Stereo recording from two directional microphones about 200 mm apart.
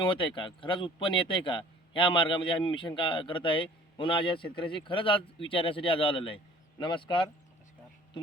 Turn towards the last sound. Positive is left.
turn(degrees=25)  # may be behind; listen again after turning